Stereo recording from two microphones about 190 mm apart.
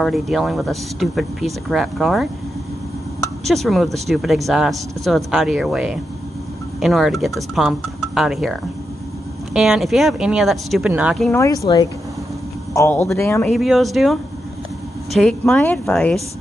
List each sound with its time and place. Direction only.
0.0 s speech: centre (ahead or behind)
3.4 s speech: centre (ahead or behind)
11.3 s speech: 15° left (ahead or behind)
13.5 s speech: centre (ahead or behind)
15.1 s speech: 5° left (ahead or behind)